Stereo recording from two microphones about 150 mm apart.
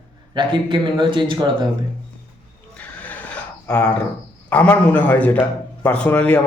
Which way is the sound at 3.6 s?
5° left (ahead or behind).